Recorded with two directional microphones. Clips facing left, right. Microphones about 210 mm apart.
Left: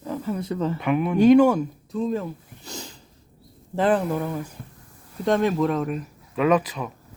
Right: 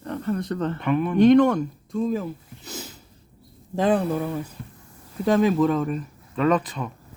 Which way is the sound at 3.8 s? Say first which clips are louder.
Even; 10° right (ahead or behind).